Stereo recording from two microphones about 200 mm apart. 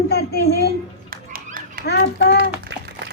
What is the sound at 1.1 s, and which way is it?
Children playing, 45° right (ahead or behind).